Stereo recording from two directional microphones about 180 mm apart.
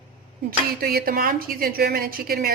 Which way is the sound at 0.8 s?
55° right (ahead or behind).